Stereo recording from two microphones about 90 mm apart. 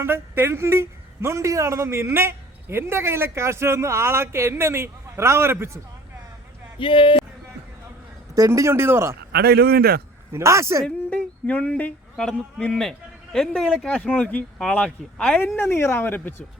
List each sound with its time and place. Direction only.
0.0 s a man's voice: 25° right (ahead or behind)
6.7 s speech: 70° left (ahead or behind)
8.4 s a man's voice: 35° right (ahead or behind)
10.3 s speech: 35° right (ahead or behind)
10.8 s speech: 15° left (ahead or behind)
13.8 s speech: 15° left (ahead or behind)
15.5 s speech: 25° left (ahead or behind)